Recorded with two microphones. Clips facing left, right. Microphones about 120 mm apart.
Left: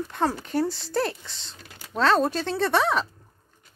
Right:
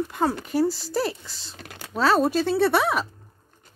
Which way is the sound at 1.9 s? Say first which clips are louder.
Right 1 dB; 5° right (ahead or behind).